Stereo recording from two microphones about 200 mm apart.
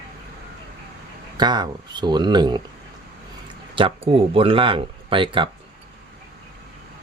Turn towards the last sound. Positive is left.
turn(degrees=-25)  # may be behind; listen again after turning